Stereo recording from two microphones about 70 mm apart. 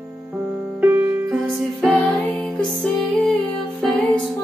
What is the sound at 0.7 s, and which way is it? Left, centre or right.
Music, right.